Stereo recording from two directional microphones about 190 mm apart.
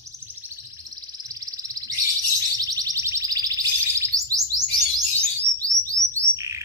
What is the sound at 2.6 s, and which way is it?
Bird, 20° right (ahead or behind).